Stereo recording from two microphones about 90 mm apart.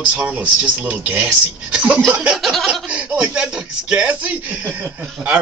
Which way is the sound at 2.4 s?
Centre (ahead or behind).